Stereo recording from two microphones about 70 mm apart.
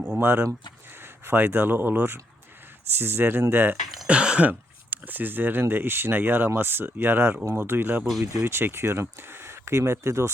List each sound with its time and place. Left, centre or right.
0.2 s speech: right
4.0 s speech: centre; by 10.2 s right